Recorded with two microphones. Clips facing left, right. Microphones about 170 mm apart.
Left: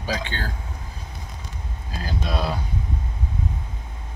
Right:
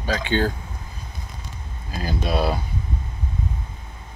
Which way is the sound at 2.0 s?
10° right (ahead or behind).